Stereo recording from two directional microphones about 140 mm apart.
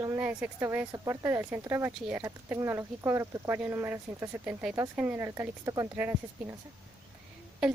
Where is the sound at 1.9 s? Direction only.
5° right (ahead or behind).